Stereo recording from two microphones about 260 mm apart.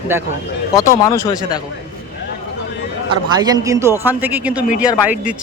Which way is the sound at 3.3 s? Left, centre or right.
Centre.